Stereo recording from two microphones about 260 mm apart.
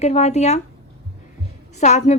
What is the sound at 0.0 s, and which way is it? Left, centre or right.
Speech, left.